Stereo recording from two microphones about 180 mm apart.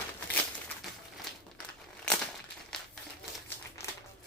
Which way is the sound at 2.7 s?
5° left (ahead or behind).